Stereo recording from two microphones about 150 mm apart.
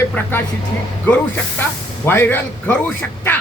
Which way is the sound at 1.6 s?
15° left (ahead or behind).